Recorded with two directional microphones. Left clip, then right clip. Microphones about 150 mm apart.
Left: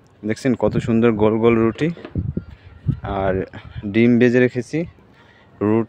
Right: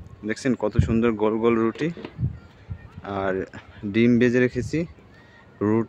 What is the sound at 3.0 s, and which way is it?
Speech, 20° left (ahead or behind).